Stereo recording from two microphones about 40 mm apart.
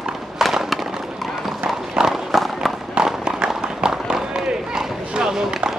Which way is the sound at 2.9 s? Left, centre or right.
Right.